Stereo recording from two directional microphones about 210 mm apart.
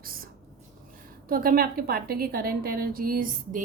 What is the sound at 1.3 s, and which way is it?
A woman's voice, 45° right (ahead or behind).